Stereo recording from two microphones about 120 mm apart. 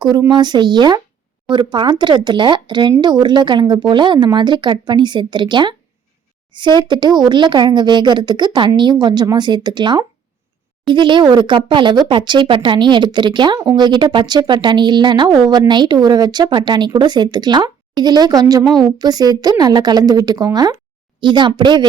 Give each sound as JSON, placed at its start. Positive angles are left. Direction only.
{"t": 0.0, "sound": "speech", "side_deg": -35}
{"t": 18.6, "sound": "a woman's voice", "side_deg": 0}
{"t": 18.9, "sound": "speech", "side_deg": -35}